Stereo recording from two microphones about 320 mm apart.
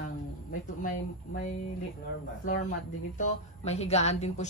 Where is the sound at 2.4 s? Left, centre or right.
Left.